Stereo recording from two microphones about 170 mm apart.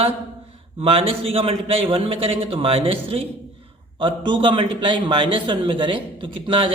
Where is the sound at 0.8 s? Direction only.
35° right (ahead or behind).